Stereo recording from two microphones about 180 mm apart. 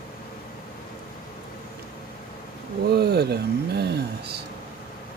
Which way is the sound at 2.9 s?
60° right (ahead or behind).